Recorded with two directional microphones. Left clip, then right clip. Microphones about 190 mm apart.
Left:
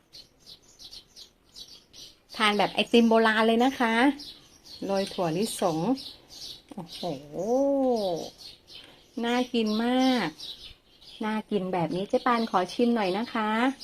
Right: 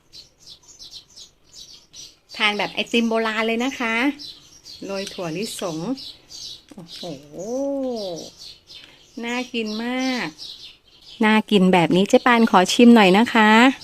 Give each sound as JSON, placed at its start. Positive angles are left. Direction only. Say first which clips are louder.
{"t": 2.3, "sound": "speech", "louder": "right 3 dB", "side_deg": 0}
{"t": 11.2, "sound": "a woman's voice", "louder": "right 12 dB", "side_deg": -35}
{"t": 11.6, "sound": "a woman's voice", "louder": "right 12 dB", "side_deg": -45}